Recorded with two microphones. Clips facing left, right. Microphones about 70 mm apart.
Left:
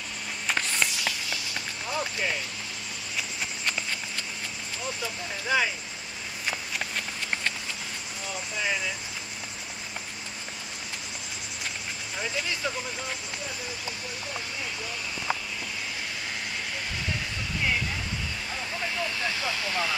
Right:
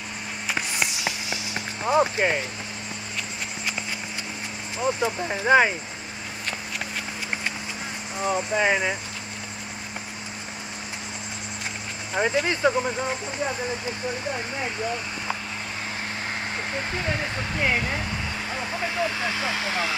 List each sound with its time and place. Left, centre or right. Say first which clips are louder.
0.5 s walk: even; centre
1.9 s speech: right 10 dB; right
4.7 s speech: right 11 dB; right
8.2 s speech: right 11 dB; right
12.1 s speech: right 10 dB; right
16.7 s speech: right 6 dB; right